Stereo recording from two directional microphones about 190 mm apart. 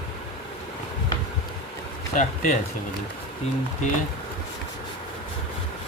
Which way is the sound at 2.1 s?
45° left (ahead or behind).